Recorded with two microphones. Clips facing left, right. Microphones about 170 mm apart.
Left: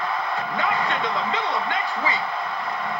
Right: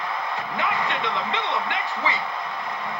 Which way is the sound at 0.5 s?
35° left (ahead or behind).